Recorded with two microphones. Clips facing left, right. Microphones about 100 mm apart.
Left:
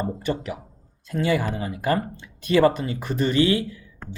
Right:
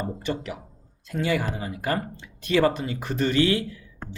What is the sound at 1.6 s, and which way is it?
Speech, 35° left (ahead or behind).